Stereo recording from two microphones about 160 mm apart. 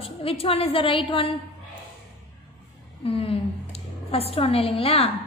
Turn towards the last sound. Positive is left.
turn(degrees=35)  # may be behind; listen again after turning